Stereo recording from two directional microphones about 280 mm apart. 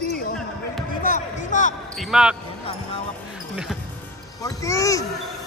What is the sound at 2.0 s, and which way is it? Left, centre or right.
Speech, centre.